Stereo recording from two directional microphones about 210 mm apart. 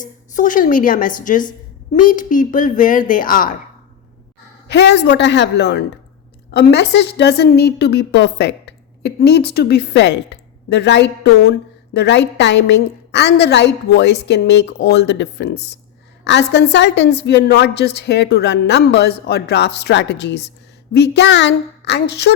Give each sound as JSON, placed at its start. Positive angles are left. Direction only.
{"t": 0.0, "sound": "speech", "side_deg": 40}
{"t": 4.7, "sound": "a woman's voice", "side_deg": 55}